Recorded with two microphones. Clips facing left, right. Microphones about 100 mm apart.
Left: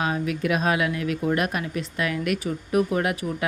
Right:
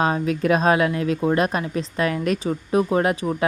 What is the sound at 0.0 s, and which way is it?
Speech, 35° right (ahead or behind).